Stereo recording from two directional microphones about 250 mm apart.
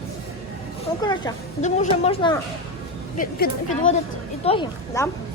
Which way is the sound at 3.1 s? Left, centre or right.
Left.